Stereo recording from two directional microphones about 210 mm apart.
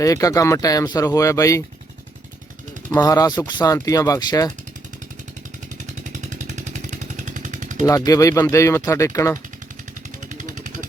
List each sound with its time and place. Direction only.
0.0 s speech: 15° left (ahead or behind)
2.9 s speech: 15° left (ahead or behind)
6.2 s vehicle: 35° right (ahead or behind)
7.9 s speech: 15° left (ahead or behind)
10.2 s motorcycle: 35° right (ahead or behind)